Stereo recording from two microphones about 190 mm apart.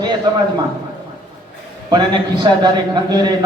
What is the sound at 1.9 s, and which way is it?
A man's voice, 25° right (ahead or behind).